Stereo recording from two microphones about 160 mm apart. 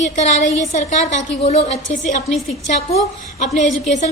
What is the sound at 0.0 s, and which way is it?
A woman's voice, 45° left (ahead or behind).